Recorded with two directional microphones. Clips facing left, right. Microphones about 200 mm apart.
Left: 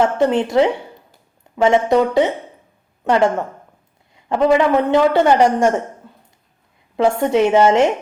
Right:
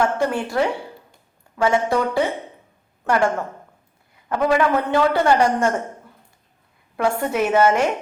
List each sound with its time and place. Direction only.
0.0 s a man's voice: 20° left (ahead or behind)
6.9 s a man's voice: 25° left (ahead or behind)